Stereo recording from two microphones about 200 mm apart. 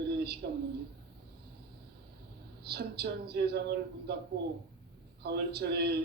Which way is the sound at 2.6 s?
55° right (ahead or behind).